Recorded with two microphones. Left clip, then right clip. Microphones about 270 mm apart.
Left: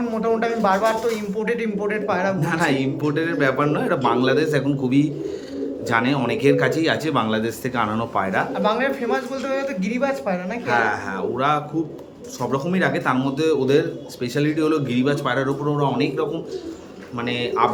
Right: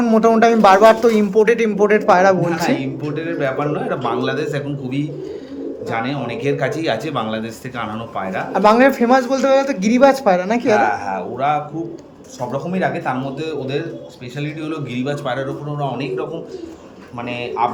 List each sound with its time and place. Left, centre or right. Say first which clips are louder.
0.0 s a man's voice: right 9 dB; right
2.6 s speech: right 1 dB; centre
8.7 s a man's voice: right 9 dB; right
10.9 s speech: right 2 dB; centre
17.2 s speech: even; centre